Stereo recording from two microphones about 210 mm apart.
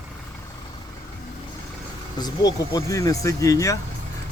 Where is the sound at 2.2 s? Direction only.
15° left (ahead or behind).